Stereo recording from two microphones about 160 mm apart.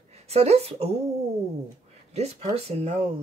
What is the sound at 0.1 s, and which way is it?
Speech, 40° right (ahead or behind).